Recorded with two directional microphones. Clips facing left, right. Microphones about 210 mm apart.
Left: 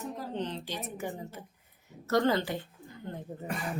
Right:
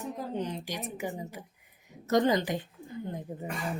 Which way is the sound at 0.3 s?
10° right (ahead or behind).